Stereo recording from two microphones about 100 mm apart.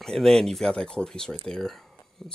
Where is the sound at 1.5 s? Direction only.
5° left (ahead or behind).